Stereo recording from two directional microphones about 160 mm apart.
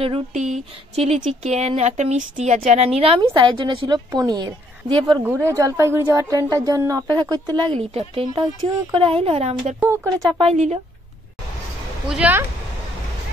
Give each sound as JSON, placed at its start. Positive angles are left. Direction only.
{"t": 0.0, "sound": "speech", "side_deg": -40}
{"t": 3.2, "sound": "speech", "side_deg": -30}
{"t": 5.2, "sound": "speech", "side_deg": -15}
{"t": 7.9, "sound": "speech", "side_deg": -35}
{"t": 9.8, "sound": "speech", "side_deg": -20}
{"t": 10.4, "sound": "speech", "side_deg": -40}
{"t": 12.1, "sound": "speech", "side_deg": -10}